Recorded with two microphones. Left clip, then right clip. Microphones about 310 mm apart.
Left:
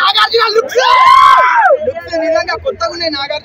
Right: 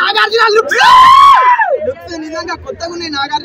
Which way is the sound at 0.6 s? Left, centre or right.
Centre.